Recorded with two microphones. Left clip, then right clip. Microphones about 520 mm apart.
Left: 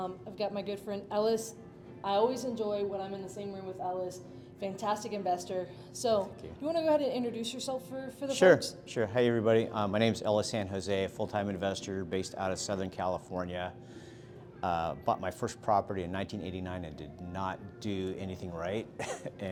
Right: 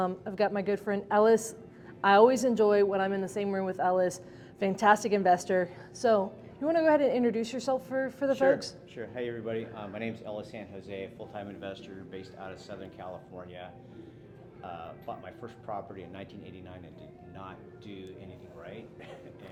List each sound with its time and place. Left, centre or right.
0.0 s a woman's voice: right
4.6 s a woman's voice: right
8.3 s speech: left